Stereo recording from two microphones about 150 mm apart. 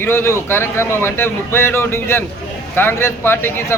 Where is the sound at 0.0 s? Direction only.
15° left (ahead or behind).